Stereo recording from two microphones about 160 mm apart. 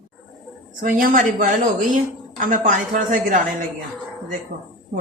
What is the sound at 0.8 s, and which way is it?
Speech, 55° right (ahead or behind).